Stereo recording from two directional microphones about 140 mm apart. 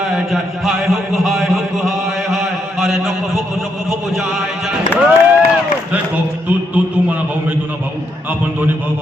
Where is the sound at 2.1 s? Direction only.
Centre (ahead or behind).